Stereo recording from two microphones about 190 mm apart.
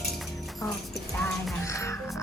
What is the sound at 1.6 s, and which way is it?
Speech, 15° left (ahead or behind).